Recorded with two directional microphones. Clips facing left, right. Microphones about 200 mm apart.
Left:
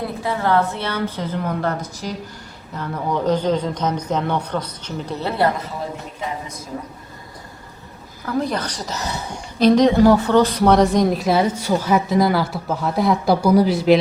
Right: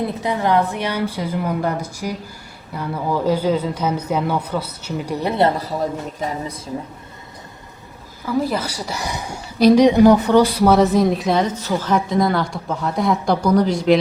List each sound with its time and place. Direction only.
0.2 s speech: 15° right (ahead or behind)
6.1 s a woman's voice: 40° right (ahead or behind)
8.2 s speech: 5° right (ahead or behind)